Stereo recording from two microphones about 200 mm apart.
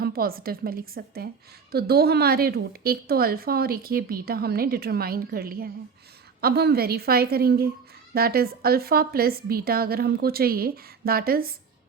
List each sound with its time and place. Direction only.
0.0 s a woman's voice: 50° right (ahead or behind)